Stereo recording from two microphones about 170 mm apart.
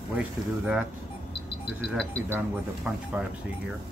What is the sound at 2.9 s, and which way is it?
Speech, 5° right (ahead or behind).